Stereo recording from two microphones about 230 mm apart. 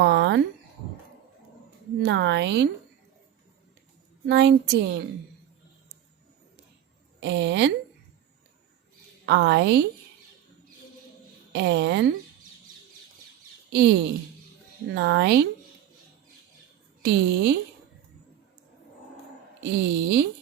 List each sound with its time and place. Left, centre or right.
0.0 s a sound: right
2.0 s a woman's voice: right
4.3 s a woman's voice: right
7.2 s a woman's voice: right
9.2 s a woman's voice: right
11.5 s a woman's voice: right
13.7 s a woman's voice: right
17.0 s a woman's voice: right
20.0 s a woman's voice: right